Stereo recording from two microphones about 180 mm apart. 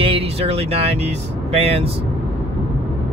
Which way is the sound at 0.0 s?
35° right (ahead or behind).